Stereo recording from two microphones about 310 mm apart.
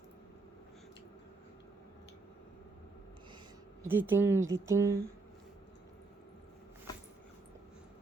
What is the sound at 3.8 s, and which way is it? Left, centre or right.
Speech, centre.